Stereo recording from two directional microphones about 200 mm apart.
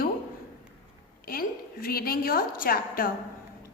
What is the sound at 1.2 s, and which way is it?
A woman's voice, 45° left (ahead or behind).